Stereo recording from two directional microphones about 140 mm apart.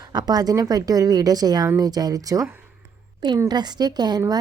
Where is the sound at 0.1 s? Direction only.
30° right (ahead or behind).